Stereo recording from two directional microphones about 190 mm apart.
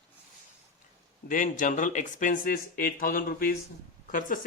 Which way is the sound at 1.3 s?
45° left (ahead or behind).